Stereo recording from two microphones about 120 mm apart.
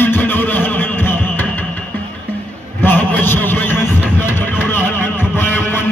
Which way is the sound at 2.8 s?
15° left (ahead or behind).